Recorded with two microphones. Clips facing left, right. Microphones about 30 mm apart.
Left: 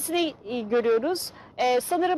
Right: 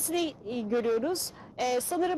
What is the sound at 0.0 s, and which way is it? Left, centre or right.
A woman's voice, left.